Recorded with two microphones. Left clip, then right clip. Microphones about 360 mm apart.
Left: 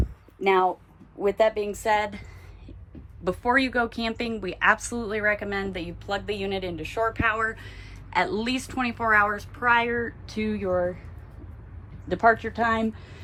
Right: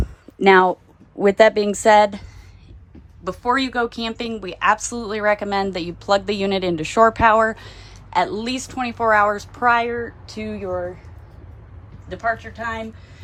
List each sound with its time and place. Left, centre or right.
0.4 s a woman's voice: right
3.2 s a woman's voice: centre
12.0 s a woman's voice: centre